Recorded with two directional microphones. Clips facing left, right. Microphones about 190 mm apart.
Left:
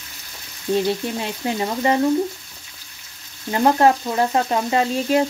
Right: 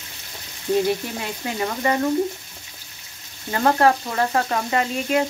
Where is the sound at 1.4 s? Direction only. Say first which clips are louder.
Left 2 dB; 25° left (ahead or behind).